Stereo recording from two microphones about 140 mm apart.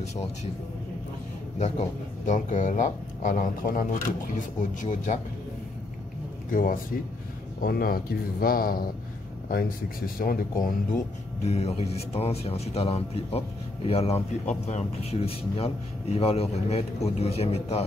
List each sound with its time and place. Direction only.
1.6 s speech: 55° left (ahead or behind); by 3.8 s 75° left (ahead or behind)
4.4 s speech: 65° left (ahead or behind)
6.5 s speech: 80° left
7.6 s speech: 90° left
11.4 s speech: 50° left (ahead or behind)